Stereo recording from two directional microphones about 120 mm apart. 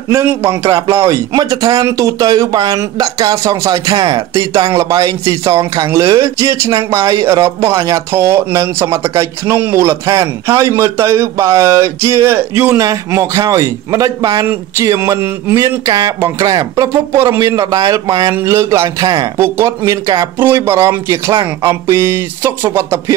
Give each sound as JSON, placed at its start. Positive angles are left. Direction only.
{"t": 0.1, "sound": "a man's voice", "side_deg": -20}
{"t": 12.8, "sound": "a man's voice", "side_deg": -30}
{"t": 20.3, "sound": "a man's voice", "side_deg": -20}